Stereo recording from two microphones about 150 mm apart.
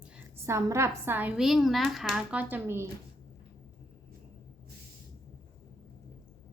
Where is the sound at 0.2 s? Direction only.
20° right (ahead or behind).